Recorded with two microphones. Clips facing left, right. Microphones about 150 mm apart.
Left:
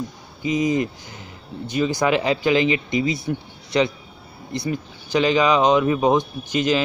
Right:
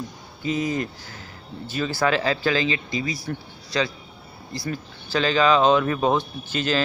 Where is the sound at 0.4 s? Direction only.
15° left (ahead or behind).